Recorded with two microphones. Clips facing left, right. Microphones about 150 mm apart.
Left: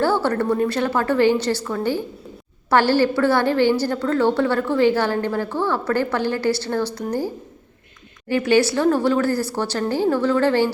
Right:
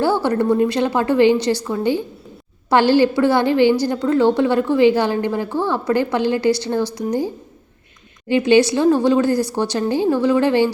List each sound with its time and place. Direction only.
0.0 s a woman's voice: 15° right (ahead or behind)
8.3 s a woman's voice: 20° right (ahead or behind)